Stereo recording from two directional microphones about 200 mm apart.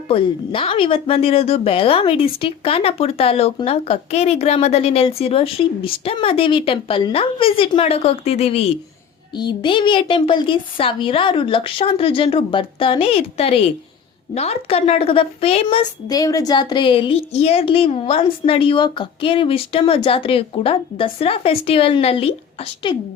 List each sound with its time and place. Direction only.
0.1 s speech: 25° left (ahead or behind)
16.0 s speech: 20° left (ahead or behind)